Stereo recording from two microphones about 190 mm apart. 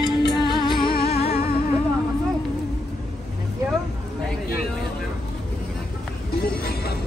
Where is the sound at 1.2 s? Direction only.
55° left (ahead or behind).